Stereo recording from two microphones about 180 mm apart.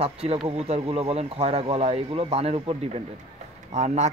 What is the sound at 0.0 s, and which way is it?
Speech, 35° right (ahead or behind).